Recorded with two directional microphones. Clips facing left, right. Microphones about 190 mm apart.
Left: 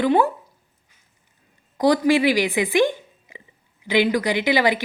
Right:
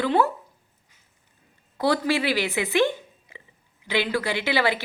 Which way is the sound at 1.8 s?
15° left (ahead or behind).